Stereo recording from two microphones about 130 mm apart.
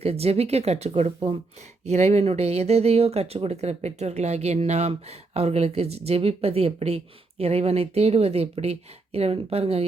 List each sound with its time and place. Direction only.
0.0 s speech: 50° right (ahead or behind)